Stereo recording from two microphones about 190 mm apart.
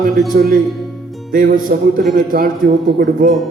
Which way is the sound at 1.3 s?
45° right (ahead or behind).